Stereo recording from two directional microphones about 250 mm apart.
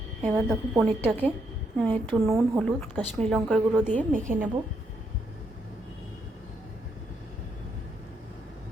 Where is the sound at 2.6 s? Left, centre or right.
Centre.